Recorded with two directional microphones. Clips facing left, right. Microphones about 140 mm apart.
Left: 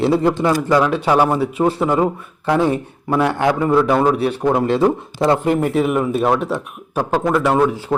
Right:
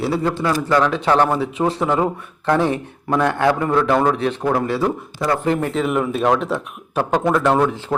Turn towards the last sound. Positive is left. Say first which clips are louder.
# left 1 dB
turn(degrees=5)  # may be behind; listen again after turning